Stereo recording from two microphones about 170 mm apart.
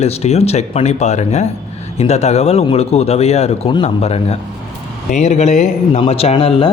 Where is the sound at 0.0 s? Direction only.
40° left (ahead or behind).